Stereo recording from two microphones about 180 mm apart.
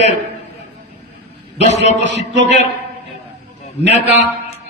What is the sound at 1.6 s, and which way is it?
Speech, 40° left (ahead or behind).